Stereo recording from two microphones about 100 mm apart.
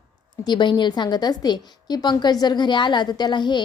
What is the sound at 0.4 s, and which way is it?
A woman's voice, 50° left (ahead or behind).